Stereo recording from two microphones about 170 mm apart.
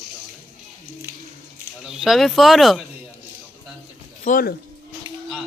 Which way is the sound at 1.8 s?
5° right (ahead or behind).